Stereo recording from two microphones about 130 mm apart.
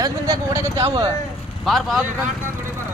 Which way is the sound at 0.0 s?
30° right (ahead or behind).